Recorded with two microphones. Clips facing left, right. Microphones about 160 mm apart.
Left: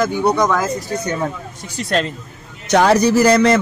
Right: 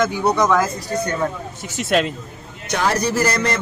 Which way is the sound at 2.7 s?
75° left (ahead or behind).